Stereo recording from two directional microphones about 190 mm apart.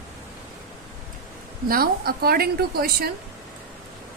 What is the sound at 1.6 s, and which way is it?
A woman's voice, 50° right (ahead or behind).